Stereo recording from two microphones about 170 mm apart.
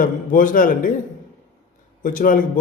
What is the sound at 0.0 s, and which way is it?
Speech, 55° left (ahead or behind).